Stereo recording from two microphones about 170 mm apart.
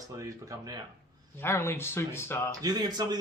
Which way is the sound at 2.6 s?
25° right (ahead or behind).